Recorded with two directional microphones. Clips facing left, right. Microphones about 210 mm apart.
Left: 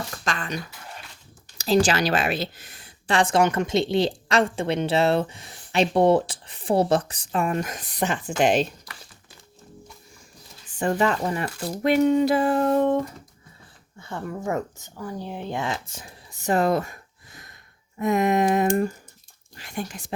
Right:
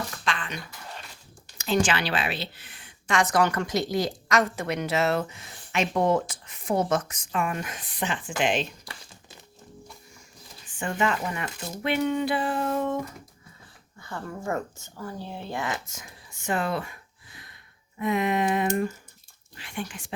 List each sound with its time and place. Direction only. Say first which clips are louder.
0.3 s a sound: left 3 dB; 40° left (ahead or behind)
1.5 s speech: left 4 dB; 35° left (ahead or behind)
10.8 s speech: left 5 dB; 35° left (ahead or behind)
14.0 s speech: left 4 dB; 20° left (ahead or behind); by 20.1 s 40° left (ahead or behind)